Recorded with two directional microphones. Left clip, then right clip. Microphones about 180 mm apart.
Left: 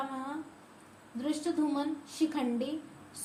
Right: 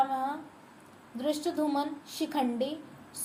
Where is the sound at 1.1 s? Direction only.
45° right (ahead or behind).